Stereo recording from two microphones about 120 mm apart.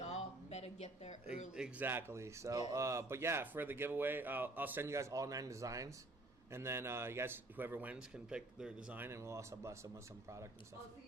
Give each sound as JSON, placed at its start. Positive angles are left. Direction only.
{"t": 0.0, "sound": "a sound", "side_deg": 65}
{"t": 1.5, "sound": "a man's voice", "side_deg": -5}
{"t": 1.9, "sound": "a man's voice", "side_deg": -20}
{"t": 9.0, "sound": "speech", "side_deg": -20}